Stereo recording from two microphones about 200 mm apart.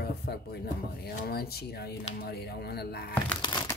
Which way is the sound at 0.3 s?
55° left (ahead or behind).